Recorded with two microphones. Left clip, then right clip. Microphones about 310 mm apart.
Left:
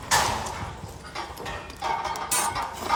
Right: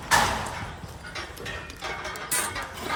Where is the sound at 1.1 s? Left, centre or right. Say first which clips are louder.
Left 2 dB; left.